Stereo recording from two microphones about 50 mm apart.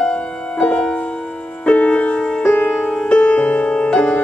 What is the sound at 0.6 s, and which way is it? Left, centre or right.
Music, left.